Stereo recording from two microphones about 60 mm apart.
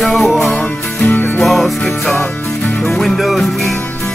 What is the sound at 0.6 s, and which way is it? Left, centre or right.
Music, left.